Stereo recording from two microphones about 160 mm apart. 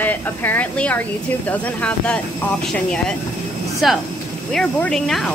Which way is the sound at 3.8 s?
Centre (ahead or behind).